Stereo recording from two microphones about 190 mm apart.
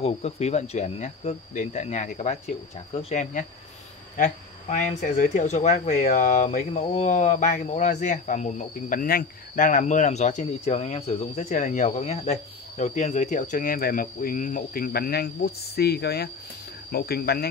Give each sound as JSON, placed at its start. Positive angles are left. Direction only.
{"t": 0.0, "sound": "speech", "side_deg": 35}